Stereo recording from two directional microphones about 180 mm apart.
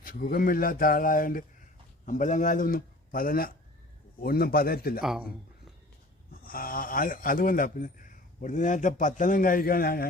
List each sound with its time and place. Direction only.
0.0 s a man's voice: 50° left (ahead or behind)
4.9 s speech: 5° right (ahead or behind)
6.3 s a man's voice: 55° left (ahead or behind)